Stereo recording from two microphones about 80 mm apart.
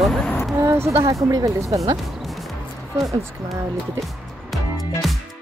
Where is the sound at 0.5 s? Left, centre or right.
Right.